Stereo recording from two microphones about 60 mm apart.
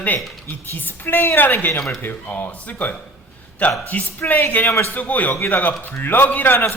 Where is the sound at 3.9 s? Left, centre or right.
Left.